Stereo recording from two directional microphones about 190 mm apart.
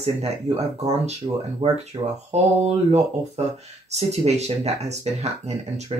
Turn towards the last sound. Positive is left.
turn(degrees=-30)  # may be behind; listen again after turning